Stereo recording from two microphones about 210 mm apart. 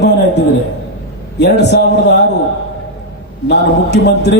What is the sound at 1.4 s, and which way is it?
Speech, 55° left (ahead or behind).